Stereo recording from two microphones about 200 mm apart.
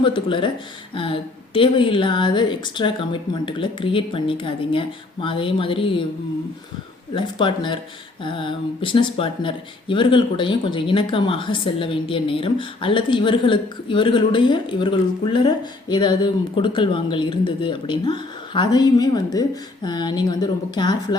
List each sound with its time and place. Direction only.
0.0 s speech: 25° left (ahead or behind)
7.1 s speech: 25° left (ahead or behind)